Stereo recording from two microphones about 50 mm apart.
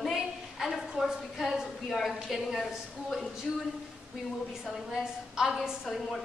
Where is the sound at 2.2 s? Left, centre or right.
Centre.